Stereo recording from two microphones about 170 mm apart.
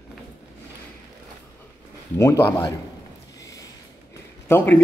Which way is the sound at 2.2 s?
15° left (ahead or behind).